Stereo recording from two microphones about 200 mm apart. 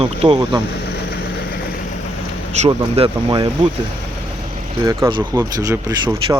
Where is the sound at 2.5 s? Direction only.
30° right (ahead or behind).